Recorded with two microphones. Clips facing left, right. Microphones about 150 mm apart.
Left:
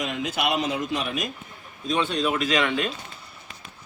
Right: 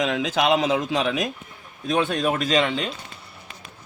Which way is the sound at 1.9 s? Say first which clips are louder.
Right 2 dB; 55° right (ahead or behind).